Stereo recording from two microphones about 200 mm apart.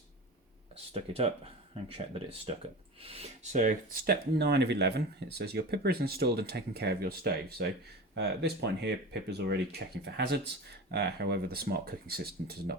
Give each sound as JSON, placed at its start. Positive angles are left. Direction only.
{"t": 0.9, "sound": "speech", "side_deg": -30}